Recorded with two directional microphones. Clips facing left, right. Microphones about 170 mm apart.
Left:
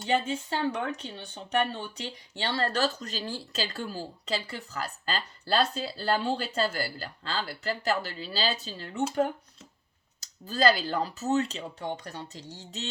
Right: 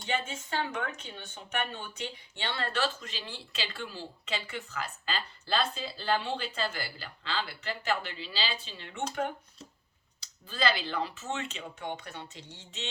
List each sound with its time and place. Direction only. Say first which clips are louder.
0.1 s speech: left 6 dB; 35° left (ahead or behind)
10.2 s speech: left 6 dB; 40° left (ahead or behind)